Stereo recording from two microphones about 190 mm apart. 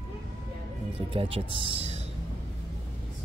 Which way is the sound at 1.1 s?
30° right (ahead or behind).